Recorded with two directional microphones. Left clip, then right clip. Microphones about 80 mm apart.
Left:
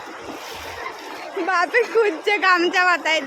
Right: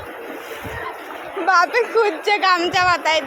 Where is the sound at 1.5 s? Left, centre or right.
Left.